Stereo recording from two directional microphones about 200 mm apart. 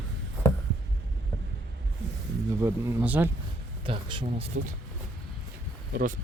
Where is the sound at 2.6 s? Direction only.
15° right (ahead or behind).